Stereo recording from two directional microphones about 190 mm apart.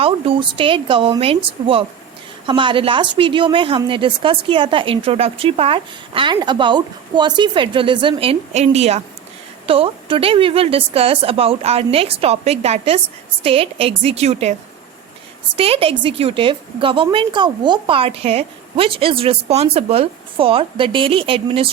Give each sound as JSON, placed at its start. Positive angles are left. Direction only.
{"t": 0.0, "sound": "a woman's voice", "side_deg": -30}
{"t": 15.5, "sound": "a woman's voice", "side_deg": -30}